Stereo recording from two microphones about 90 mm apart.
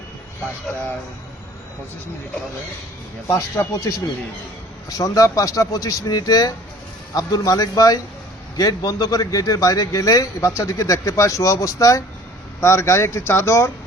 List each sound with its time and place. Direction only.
3.2 s a man's voice: 30° left (ahead or behind)